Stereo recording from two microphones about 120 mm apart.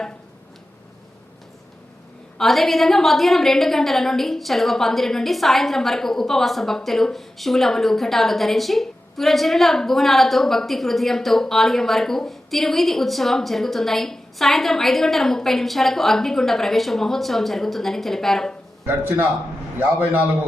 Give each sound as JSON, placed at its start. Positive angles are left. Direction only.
{"t": 2.4, "sound": "a woman's voice", "side_deg": 0}
{"t": 18.9, "sound": "a man's voice", "side_deg": -20}